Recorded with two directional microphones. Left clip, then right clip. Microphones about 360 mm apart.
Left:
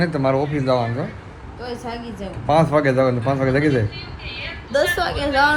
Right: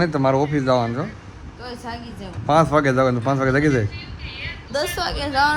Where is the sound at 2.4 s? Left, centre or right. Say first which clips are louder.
Even; centre.